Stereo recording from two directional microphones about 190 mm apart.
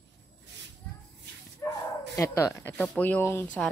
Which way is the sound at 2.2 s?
15° left (ahead or behind).